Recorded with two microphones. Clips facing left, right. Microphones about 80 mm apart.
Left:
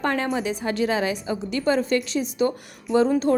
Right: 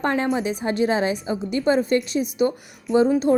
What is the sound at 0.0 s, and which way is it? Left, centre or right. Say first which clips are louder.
A woman's voice: right 2 dB; right.